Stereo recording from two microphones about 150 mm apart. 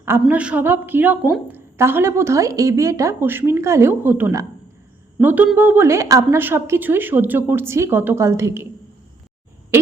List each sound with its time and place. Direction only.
0.0 s a woman's voice: 15° right (ahead or behind)